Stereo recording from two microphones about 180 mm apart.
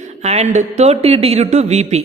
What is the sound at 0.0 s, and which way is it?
A woman's voice, 40° right (ahead or behind).